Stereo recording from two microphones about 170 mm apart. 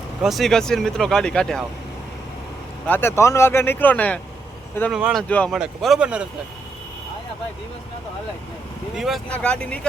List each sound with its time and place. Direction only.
0.2 s speech: centre (ahead or behind)
2.8 s speech: 10° left (ahead or behind)
4.9 s speech: 5° right (ahead or behind)
5.3 s speech: 10° left (ahead or behind)
5.5 s speech: centre (ahead or behind)
9.0 s speech: centre (ahead or behind)